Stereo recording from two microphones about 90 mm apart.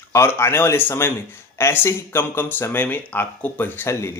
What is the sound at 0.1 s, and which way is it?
Speech, 30° left (ahead or behind).